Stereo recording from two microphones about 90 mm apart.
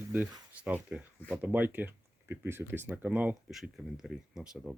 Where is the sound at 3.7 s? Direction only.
5° right (ahead or behind).